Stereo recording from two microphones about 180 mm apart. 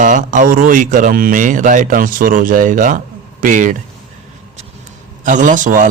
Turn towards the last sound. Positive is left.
turn(degrees=-45)  # may be behind; listen again after turning